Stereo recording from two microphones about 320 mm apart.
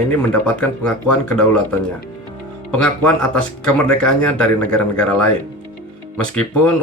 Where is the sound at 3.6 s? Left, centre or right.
Centre.